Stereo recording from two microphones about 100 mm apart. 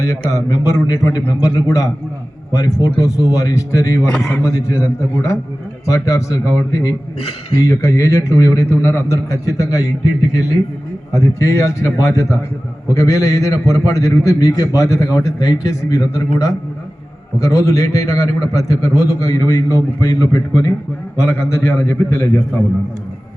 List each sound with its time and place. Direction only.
0.0 s a man's voice: 35° left (ahead or behind)
21.2 s a man's voice: 25° left (ahead or behind)